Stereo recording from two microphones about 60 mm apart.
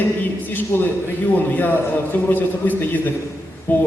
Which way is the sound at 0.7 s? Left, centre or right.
Left.